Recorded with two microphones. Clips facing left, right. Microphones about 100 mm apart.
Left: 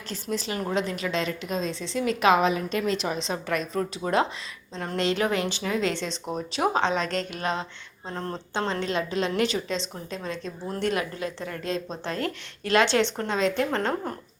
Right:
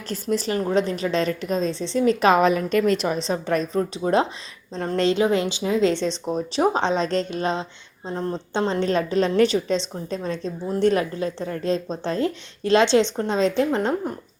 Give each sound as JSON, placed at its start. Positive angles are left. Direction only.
{"t": 0.1, "sound": "a woman's voice", "side_deg": -45}
{"t": 5.1, "sound": "a woman's voice", "side_deg": -25}
{"t": 5.9, "sound": "speech", "side_deg": 40}
{"t": 6.6, "sound": "a woman's voice", "side_deg": -30}
{"t": 8.9, "sound": "a woman's voice", "side_deg": -40}
{"t": 13.7, "sound": "a woman's voice", "side_deg": -15}